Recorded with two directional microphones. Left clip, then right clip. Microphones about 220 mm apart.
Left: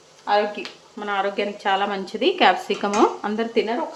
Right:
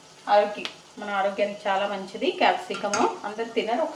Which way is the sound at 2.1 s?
55° left (ahead or behind).